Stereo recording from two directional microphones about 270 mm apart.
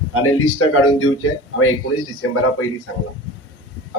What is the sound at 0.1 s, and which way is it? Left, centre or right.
A man's voice, left.